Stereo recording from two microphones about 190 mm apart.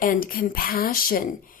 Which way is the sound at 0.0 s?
45° left (ahead or behind).